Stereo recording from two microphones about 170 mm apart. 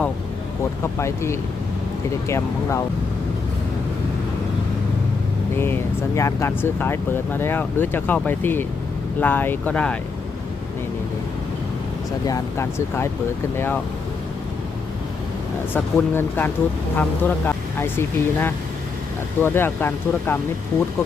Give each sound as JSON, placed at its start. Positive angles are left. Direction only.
{"t": 0.9, "sound": "speech", "side_deg": 15}
{"t": 5.5, "sound": "speech", "side_deg": 15}
{"t": 12.2, "sound": "speech", "side_deg": 20}
{"t": 15.7, "sound": "speech", "side_deg": 10}